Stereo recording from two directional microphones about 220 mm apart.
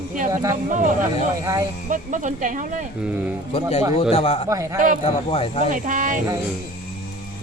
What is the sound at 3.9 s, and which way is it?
Speech, 25° left (ahead or behind).